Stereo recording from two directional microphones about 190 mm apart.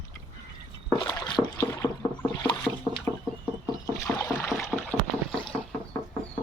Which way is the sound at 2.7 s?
Centre (ahead or behind).